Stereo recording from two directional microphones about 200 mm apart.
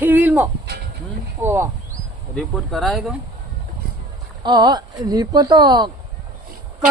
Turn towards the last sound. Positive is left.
turn(degrees=-20)  # may be behind; listen again after turning